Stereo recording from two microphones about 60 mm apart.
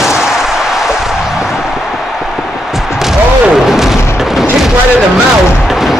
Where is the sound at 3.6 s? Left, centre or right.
Centre.